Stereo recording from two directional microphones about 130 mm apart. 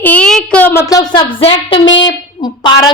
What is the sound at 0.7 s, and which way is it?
Speech, 25° left (ahead or behind).